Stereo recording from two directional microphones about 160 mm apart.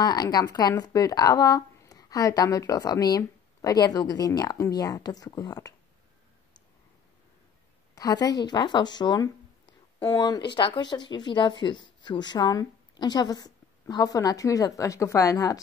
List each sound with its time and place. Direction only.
0.0 s speech: 25° left (ahead or behind)
7.9 s speech: 25° left (ahead or behind)